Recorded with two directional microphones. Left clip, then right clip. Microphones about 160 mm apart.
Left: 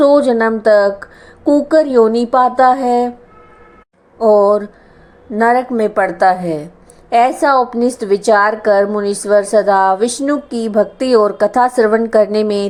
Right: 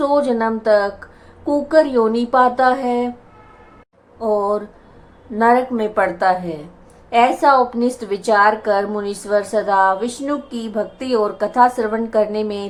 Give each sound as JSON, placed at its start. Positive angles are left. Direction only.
{"t": 0.0, "sound": "a woman's voice", "side_deg": 30}
{"t": 4.2, "sound": "a woman's voice", "side_deg": 40}